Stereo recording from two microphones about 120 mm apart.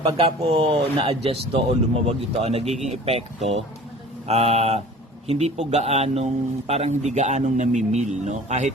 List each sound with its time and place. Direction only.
0.2 s a man's voice: 60° right (ahead or behind); by 8.7 s 75° right (ahead or behind)